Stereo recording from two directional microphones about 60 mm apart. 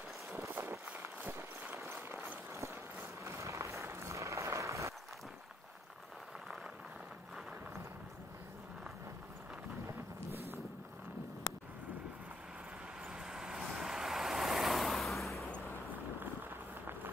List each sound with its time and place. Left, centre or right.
0.5 s run: right
2.5 s vehicle: right
13.2 s vehicle: centre